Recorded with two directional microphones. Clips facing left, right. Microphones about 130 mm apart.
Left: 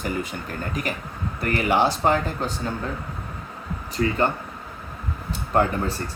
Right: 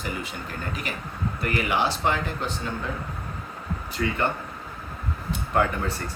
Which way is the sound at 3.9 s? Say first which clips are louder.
Left 4 dB; 35° left (ahead or behind).